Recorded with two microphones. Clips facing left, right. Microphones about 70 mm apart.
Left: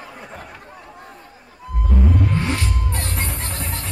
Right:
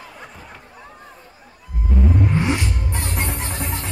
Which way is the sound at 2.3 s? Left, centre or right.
Centre.